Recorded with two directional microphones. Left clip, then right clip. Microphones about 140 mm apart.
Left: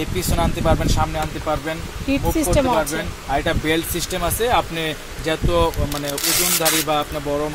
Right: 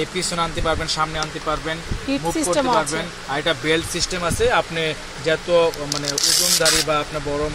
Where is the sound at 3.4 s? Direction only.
65° left (ahead or behind); by 6.1 s 90° left.